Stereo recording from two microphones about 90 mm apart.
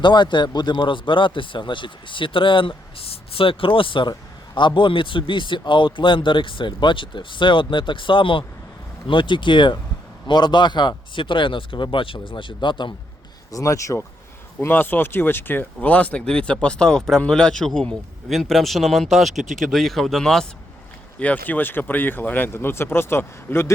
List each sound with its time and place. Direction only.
0.0 s speech: 55° left (ahead or behind)
9.0 s speech: 60° left (ahead or behind)
13.5 s speech: 40° left (ahead or behind)
14.6 s speech: 25° left (ahead or behind); by 20.5 s 5° left (ahead or behind)
21.2 s speech: 20° left (ahead or behind)